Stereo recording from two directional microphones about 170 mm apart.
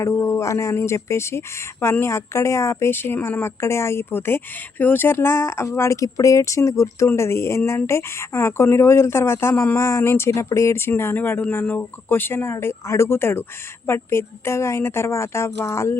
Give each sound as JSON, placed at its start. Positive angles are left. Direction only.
{"t": 0.0, "sound": "speech", "side_deg": 15}